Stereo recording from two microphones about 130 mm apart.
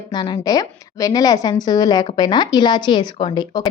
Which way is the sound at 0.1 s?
35° left (ahead or behind).